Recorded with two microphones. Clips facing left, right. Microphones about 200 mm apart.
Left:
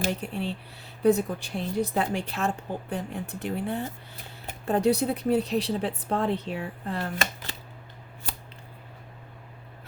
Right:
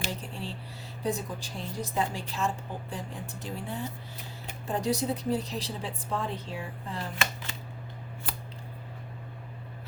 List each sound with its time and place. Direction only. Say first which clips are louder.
0.0 s speech: left 7 dB; 65° left (ahead or behind)